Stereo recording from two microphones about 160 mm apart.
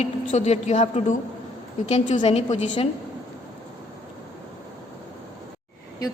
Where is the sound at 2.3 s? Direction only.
45° left (ahead or behind).